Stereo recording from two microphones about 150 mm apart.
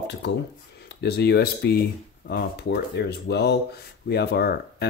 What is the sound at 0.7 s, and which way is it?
Speech, 90° left.